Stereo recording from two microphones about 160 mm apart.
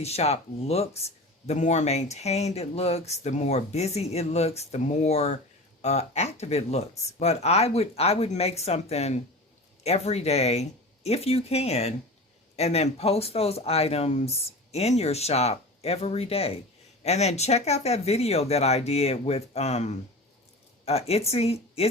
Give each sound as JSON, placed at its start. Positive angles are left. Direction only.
{"t": 0.0, "sound": "speech", "side_deg": 40}